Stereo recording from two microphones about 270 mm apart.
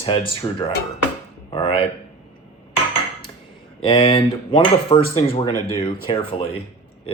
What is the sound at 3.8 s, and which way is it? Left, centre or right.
Speech, centre.